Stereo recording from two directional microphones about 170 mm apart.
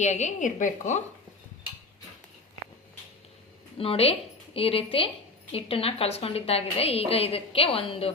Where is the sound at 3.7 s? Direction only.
35° left (ahead or behind).